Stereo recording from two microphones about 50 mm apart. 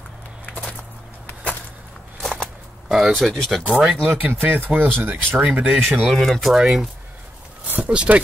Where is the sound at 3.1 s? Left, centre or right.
Centre.